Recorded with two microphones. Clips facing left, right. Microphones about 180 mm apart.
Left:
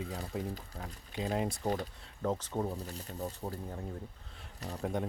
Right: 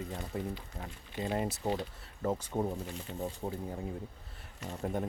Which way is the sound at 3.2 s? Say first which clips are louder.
Right 2 dB; 15° right (ahead or behind).